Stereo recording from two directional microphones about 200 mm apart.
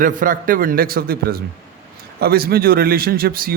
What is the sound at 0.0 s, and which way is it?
A man's voice, 45° right (ahead or behind).